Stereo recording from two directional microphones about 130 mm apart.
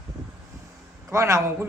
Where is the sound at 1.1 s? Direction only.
20° right (ahead or behind).